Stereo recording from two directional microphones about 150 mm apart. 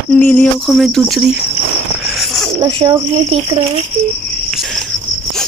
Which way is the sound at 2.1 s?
Centre (ahead or behind).